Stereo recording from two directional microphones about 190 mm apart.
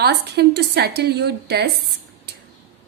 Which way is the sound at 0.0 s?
60° right (ahead or behind).